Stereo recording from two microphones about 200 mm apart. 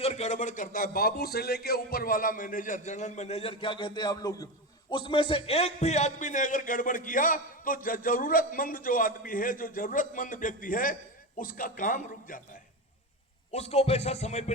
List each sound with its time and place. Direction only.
0.0 s a man's voice: 35° left (ahead or behind)
13.5 s a man's voice: 30° left (ahead or behind)